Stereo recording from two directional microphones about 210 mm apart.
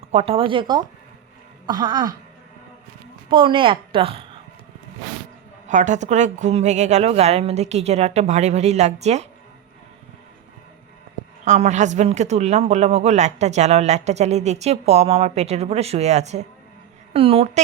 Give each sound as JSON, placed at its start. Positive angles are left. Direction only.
{"t": 0.1, "sound": "a woman's voice", "side_deg": -30}
{"t": 3.2, "sound": "a woman's voice", "side_deg": -25}
{"t": 5.6, "sound": "a woman's voice", "side_deg": -35}
{"t": 11.4, "sound": "a woman's voice", "side_deg": -35}